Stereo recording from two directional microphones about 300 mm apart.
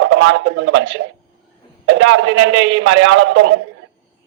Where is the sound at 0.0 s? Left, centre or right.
Right.